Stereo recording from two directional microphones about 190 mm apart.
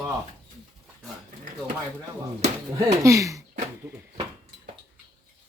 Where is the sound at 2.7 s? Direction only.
15° right (ahead or behind).